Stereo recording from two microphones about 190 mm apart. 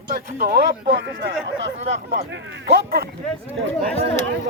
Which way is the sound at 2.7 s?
55° right (ahead or behind).